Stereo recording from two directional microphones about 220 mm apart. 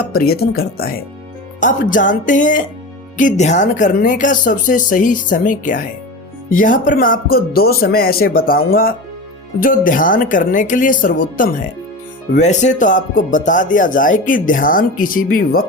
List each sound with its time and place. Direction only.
0.0 s speech: 45° left (ahead or behind)